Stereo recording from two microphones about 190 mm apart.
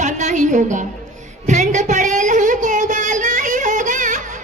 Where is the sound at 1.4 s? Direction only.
40° right (ahead or behind).